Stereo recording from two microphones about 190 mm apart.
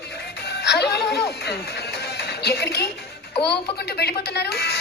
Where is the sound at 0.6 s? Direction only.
60° left (ahead or behind).